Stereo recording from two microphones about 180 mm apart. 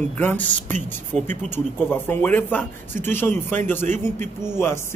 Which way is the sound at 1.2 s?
40° right (ahead or behind).